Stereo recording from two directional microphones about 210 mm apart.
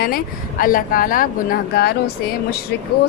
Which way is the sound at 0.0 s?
45° left (ahead or behind).